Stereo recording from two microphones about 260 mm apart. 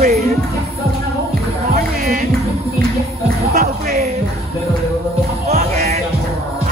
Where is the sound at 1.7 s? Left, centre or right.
Right.